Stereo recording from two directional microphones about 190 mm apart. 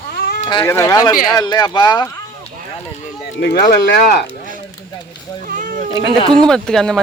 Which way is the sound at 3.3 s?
55° left (ahead or behind).